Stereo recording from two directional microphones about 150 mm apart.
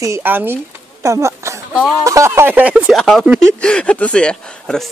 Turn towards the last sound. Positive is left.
turn(degrees=5)  # may be behind; listen again after turning